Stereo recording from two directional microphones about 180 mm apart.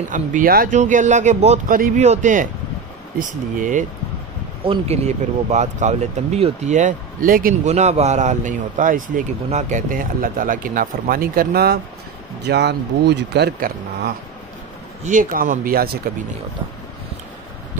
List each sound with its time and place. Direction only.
0.1 s speech: 50° right (ahead or behind)
1.7 s speech: 50° right (ahead or behind)
4.6 s speech: 35° right (ahead or behind); by 11.8 s 60° right (ahead or behind)
12.4 s speech: 70° right (ahead or behind); by 15.9 s 55° right (ahead or behind)